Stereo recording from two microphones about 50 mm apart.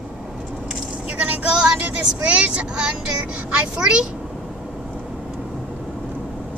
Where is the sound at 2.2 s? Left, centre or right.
Right.